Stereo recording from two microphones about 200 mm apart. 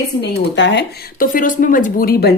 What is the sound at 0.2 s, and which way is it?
Speech, 60° left (ahead or behind).